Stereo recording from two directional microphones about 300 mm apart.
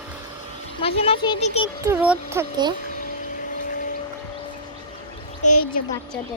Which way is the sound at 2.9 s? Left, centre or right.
Left.